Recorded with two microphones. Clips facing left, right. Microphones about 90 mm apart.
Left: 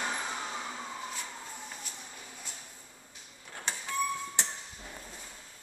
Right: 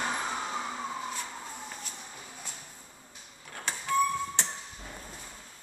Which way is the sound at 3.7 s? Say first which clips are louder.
Right 1 dB; 20° left (ahead or behind).